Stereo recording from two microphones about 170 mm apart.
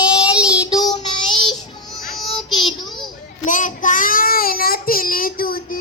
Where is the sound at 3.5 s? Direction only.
50° left (ahead or behind).